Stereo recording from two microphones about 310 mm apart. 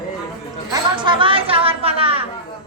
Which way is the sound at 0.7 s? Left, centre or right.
Centre.